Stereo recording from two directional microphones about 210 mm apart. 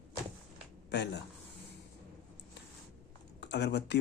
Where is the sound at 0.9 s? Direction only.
55° left (ahead or behind).